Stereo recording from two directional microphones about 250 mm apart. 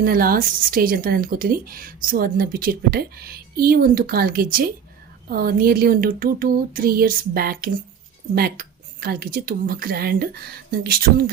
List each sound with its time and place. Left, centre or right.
0.0 s a woman's voice: right